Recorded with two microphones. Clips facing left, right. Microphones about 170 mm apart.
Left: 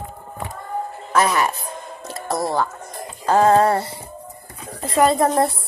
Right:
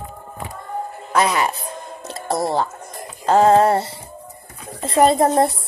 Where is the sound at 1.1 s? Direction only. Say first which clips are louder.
Even; 15° right (ahead or behind).